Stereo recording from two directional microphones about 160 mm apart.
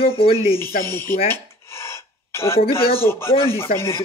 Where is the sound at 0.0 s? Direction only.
35° left (ahead or behind).